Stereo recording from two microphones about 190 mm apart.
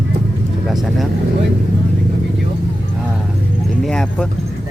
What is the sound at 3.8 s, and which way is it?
Speech, 5° left (ahead or behind).